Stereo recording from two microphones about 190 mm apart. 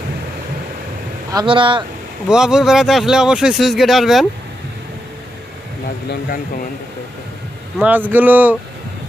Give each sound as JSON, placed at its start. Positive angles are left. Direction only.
{"t": 1.3, "sound": "speech", "side_deg": -25}
{"t": 2.2, "sound": "speech", "side_deg": -5}
{"t": 7.8, "sound": "speech", "side_deg": -10}